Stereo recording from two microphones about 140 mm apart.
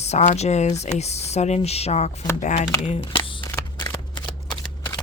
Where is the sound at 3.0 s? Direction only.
40° left (ahead or behind).